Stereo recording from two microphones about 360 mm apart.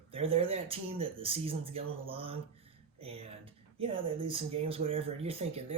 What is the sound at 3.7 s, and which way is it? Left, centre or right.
Speech, centre.